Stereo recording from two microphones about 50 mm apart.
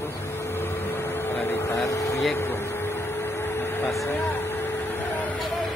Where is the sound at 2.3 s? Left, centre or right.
Left.